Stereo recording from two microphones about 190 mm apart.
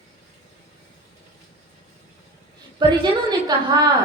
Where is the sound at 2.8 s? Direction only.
25° right (ahead or behind).